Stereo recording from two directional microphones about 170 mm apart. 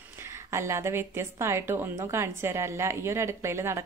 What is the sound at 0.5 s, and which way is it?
A woman's voice, 15° right (ahead or behind).